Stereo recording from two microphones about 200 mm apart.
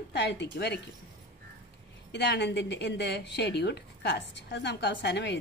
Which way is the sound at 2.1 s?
60° left (ahead or behind).